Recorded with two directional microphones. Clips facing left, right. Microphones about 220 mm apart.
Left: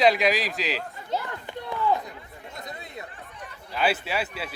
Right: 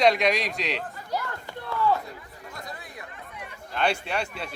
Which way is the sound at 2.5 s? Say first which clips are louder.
Left 2 dB; 20° left (ahead or behind).